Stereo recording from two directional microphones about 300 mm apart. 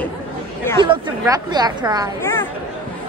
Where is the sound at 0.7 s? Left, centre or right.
Centre.